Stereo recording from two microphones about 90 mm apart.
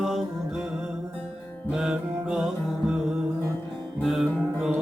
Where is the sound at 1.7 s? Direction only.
5° right (ahead or behind).